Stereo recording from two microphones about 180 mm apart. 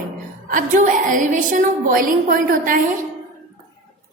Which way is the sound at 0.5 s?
45° right (ahead or behind).